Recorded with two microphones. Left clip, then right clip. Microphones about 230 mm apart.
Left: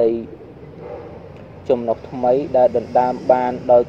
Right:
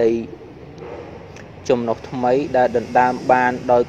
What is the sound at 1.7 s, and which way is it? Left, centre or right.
Speech, right.